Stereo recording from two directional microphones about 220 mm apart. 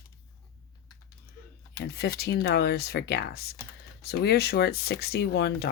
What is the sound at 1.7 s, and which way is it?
Speech, 45° left (ahead or behind).